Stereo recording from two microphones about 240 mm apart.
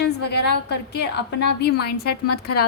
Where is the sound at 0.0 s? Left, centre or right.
Left.